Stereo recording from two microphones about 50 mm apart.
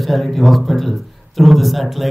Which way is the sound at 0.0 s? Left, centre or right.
Centre.